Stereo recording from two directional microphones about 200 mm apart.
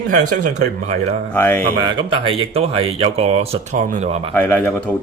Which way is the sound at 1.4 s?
10° left (ahead or behind).